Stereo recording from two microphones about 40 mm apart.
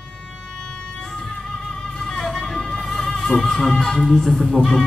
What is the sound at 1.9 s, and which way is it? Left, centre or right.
Music, centre.